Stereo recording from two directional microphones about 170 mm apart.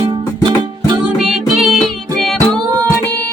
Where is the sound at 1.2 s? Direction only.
5° right (ahead or behind).